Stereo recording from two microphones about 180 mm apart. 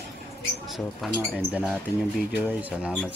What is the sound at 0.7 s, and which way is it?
Speech, centre (ahead or behind).